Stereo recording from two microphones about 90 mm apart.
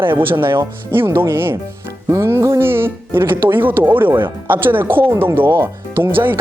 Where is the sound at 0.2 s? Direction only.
25° right (ahead or behind).